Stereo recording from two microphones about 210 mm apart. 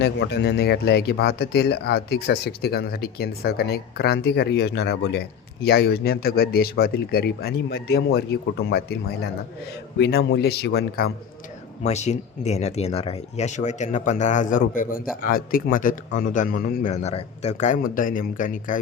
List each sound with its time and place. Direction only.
0.0 s speech: 50° left (ahead or behind)
11.8 s speech: 35° left (ahead or behind)